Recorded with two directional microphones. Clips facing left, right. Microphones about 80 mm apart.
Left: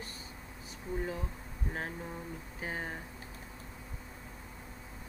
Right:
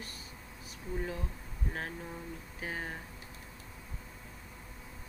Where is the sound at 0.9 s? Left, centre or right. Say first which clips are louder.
Left 1 dB; centre.